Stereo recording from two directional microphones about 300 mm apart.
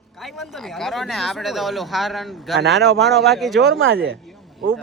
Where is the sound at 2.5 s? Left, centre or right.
Right.